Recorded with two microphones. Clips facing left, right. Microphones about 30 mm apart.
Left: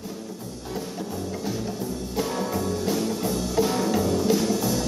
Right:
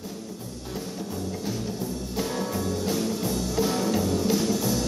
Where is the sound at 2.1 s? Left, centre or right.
Centre.